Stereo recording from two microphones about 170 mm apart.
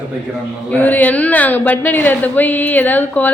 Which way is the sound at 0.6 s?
10° left (ahead or behind).